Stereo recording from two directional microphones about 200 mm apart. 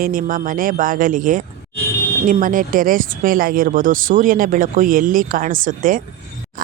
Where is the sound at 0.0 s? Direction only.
45° right (ahead or behind).